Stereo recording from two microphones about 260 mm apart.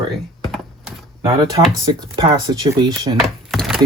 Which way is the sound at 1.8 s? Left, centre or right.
Centre.